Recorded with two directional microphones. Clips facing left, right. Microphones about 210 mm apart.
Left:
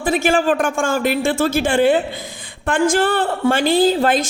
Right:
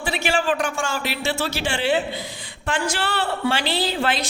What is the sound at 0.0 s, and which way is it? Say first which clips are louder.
A man's voice: left 7 dB; 50° left (ahead or behind).